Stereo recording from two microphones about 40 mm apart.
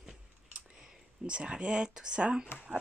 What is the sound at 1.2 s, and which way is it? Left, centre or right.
Speech, right.